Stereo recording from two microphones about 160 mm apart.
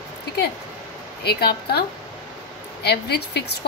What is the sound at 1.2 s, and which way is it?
A woman's voice, 80° left.